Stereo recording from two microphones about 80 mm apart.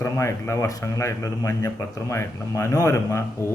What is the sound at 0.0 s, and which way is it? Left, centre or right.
A man's voice, left.